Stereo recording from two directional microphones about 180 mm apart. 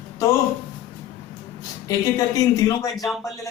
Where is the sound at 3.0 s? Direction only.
Centre (ahead or behind).